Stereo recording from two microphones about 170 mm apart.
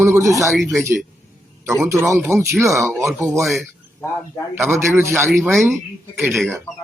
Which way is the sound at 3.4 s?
Centre (ahead or behind).